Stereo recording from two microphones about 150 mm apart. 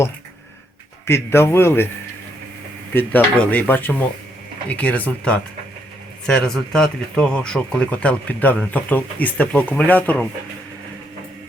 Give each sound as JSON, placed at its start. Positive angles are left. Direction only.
{"t": 1.0, "sound": "speech", "side_deg": 15}
{"t": 2.9, "sound": "speech", "side_deg": 10}